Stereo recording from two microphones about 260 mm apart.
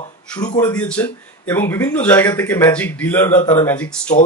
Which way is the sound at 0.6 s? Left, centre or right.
Centre.